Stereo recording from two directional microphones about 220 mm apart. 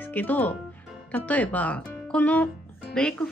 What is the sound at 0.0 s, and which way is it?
Speech, 10° left (ahead or behind).